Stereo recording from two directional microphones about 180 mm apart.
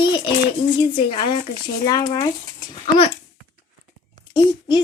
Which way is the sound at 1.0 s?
25° left (ahead or behind).